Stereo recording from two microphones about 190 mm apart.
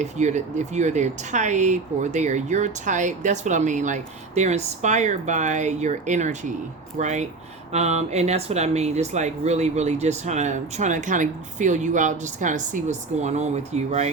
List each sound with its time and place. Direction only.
0.0 s speech: 40° right (ahead or behind)